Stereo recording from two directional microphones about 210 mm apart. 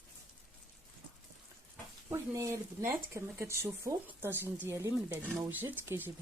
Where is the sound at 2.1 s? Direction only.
15° right (ahead or behind).